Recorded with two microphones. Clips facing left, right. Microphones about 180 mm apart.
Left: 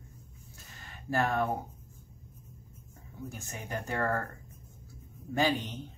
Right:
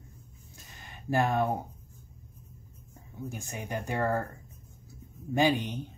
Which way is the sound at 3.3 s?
15° right (ahead or behind).